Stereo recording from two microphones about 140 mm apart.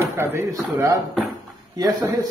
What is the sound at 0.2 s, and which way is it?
A man's voice, 15° right (ahead or behind).